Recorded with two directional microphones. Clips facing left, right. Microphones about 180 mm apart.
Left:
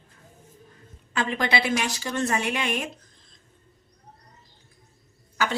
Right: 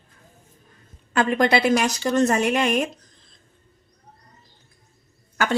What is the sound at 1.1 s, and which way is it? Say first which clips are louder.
A woman's voice: right 7 dB; 45° right (ahead or behind).